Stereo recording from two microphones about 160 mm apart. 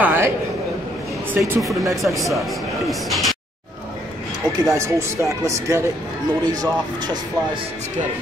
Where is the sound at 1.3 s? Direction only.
15° right (ahead or behind).